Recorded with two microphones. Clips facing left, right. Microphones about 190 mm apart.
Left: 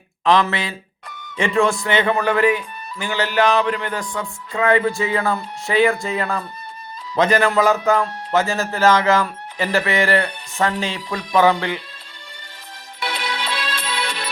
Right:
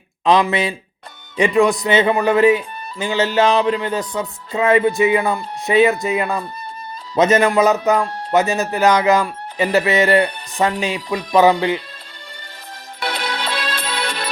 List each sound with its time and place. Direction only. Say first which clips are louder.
0.3 s speech: right 2 dB; 15° right (ahead or behind)
13.0 s music: right 2 dB; 40° right (ahead or behind)